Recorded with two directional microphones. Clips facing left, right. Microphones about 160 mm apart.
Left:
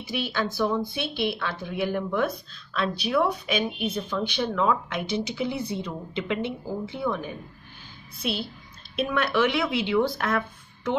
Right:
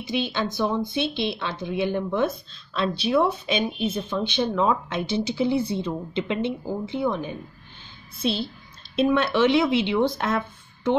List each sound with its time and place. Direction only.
0.0 s speech: 20° right (ahead or behind)